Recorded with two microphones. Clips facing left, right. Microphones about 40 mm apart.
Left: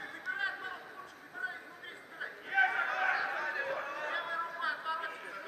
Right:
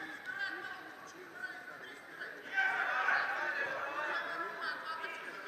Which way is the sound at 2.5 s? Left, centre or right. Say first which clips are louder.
Left 4 dB; centre.